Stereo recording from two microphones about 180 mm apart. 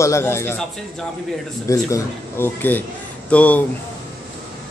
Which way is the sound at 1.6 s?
15° left (ahead or behind).